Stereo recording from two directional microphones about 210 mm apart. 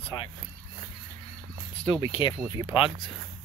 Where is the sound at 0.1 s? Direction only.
20° left (ahead or behind).